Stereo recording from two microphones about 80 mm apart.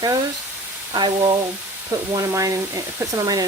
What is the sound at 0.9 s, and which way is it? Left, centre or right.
Sizzle, right.